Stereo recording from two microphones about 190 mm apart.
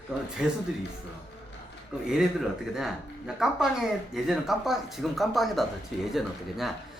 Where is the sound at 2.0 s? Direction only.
5° right (ahead or behind).